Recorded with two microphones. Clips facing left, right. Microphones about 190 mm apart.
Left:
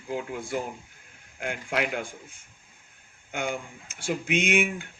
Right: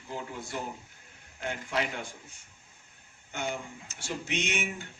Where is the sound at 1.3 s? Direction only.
55° left (ahead or behind).